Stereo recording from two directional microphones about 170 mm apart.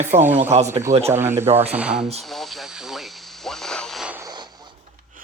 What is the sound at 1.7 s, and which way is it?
Speech, 5° right (ahead or behind).